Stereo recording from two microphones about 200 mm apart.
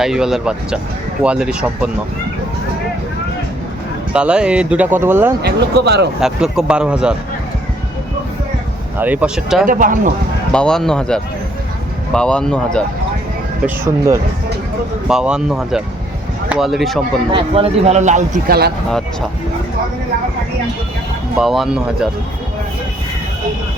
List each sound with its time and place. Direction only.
0.0 s speech: centre (ahead or behind)
4.1 s speech: 5° right (ahead or behind)
5.4 s speech: 55° right (ahead or behind)
6.1 s speech: centre (ahead or behind)
9.0 s speech: 10° right (ahead or behind)
9.6 s speech: 45° right (ahead or behind)
10.5 s speech: 5° left (ahead or behind)
15.0 s speech: 5° right (ahead or behind)
17.3 s speech: 30° right (ahead or behind); by 18.7 s 50° right (ahead or behind)
18.9 s speech: centre (ahead or behind)
21.3 s speech: centre (ahead or behind)